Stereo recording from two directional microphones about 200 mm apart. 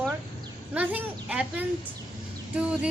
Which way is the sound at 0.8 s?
5° right (ahead or behind).